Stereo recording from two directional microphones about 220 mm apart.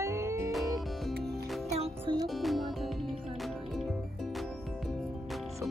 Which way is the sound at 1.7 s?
25° right (ahead or behind).